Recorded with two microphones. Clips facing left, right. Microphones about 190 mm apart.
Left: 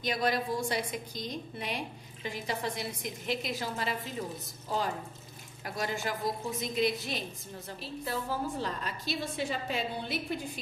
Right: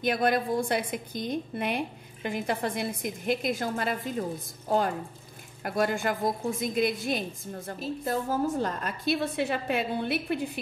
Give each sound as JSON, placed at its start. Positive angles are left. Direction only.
{"t": 0.0, "sound": "a woman's voice", "side_deg": -55}